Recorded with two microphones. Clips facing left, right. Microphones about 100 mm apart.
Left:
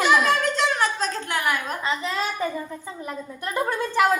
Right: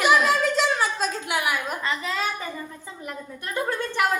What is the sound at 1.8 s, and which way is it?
Speech, 20° left (ahead or behind).